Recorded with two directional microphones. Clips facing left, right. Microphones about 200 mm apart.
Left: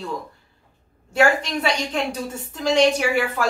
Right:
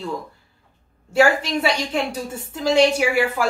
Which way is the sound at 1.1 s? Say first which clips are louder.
Right 2 dB; 10° right (ahead or behind).